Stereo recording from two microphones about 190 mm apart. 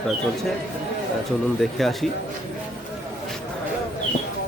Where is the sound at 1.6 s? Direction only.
Centre (ahead or behind).